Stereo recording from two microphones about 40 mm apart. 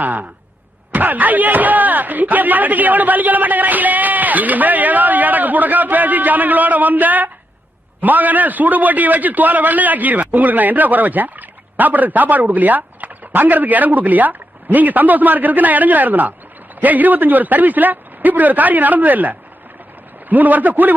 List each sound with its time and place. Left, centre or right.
0.0 s a man's voice: right